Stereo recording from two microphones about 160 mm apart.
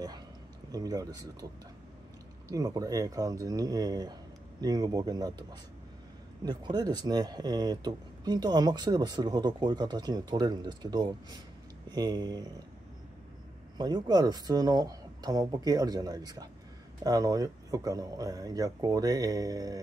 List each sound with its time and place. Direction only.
0.7 s speech: 25° right (ahead or behind)
2.5 s speech: 20° right (ahead or behind)
13.7 s speech: 25° right (ahead or behind)